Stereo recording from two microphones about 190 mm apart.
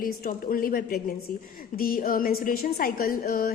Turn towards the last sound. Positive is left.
turn(degrees=50)  # may be behind; listen again after turning